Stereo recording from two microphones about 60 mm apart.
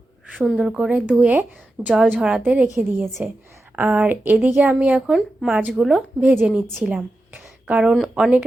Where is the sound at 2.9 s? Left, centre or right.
Right; by 5.9 s centre.